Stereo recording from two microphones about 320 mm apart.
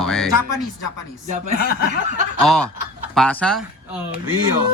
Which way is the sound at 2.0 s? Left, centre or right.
Right.